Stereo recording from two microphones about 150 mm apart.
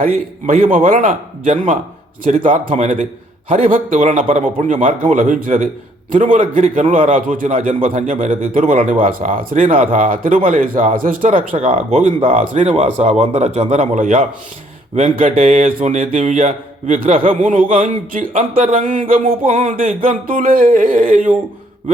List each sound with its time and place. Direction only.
0.0 s a man's voice: 65° right (ahead or behind)
2.2 s a man's voice: 60° right (ahead or behind)
11.5 s a man's voice: 40° right (ahead or behind); by 21.3 s 65° right (ahead or behind)